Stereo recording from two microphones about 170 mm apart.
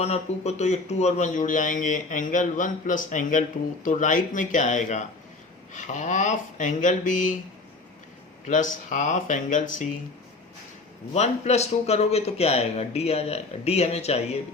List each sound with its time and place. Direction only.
0.0 s speech: 40° left (ahead or behind)
8.4 s speech: 50° left (ahead or behind)
11.1 s a man's voice: 40° left (ahead or behind)